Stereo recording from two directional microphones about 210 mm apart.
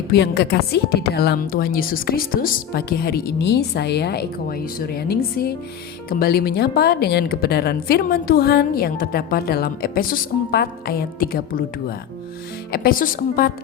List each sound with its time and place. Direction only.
0.1 s speech: 50° left (ahead or behind)